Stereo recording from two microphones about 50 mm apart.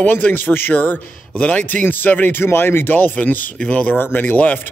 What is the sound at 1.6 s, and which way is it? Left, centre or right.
Speech, left.